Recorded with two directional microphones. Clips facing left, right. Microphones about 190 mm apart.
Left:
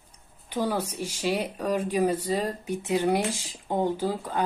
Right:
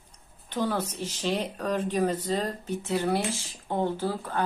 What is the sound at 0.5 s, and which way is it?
Speech, 10° left (ahead or behind).